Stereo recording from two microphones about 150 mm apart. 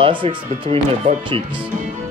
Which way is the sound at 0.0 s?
35° right (ahead or behind).